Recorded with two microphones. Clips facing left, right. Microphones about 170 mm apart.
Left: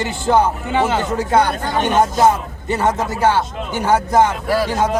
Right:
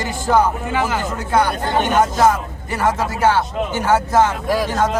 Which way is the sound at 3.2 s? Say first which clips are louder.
Right 1 dB; 15° left (ahead or behind).